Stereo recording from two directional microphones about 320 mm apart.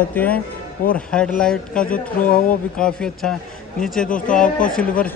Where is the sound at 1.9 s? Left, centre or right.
Left.